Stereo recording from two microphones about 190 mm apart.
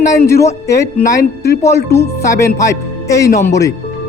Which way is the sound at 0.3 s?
15° left (ahead or behind).